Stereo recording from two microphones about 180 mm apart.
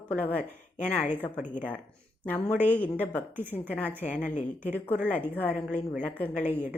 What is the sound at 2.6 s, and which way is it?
Speech, 10° left (ahead or behind).